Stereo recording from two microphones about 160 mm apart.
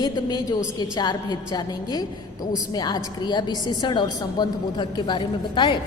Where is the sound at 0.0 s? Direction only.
25° left (ahead or behind).